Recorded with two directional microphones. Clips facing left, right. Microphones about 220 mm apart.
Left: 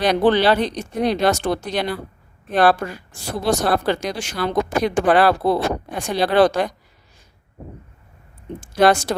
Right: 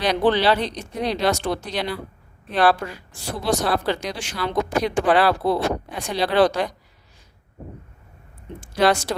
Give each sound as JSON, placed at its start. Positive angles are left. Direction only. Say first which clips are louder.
{"t": 0.0, "sound": "a woman's voice", "louder": "left 3 dB", "side_deg": 50}
{"t": 8.6, "sound": "a woman's voice", "louder": "left 3 dB", "side_deg": 45}